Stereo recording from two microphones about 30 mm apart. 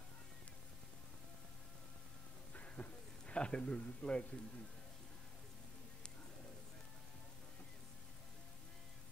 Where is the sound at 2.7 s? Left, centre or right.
Left.